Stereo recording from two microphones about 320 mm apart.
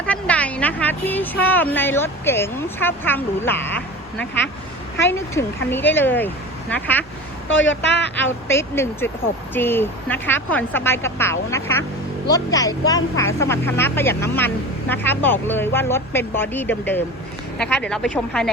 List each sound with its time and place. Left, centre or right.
0.0 s speech: centre
7.4 s speech: left
8.4 s speech: centre